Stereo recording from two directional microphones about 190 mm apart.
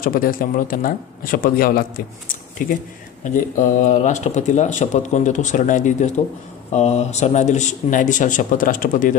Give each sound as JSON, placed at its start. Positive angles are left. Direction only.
{"t": 0.0, "sound": "speech", "side_deg": 50}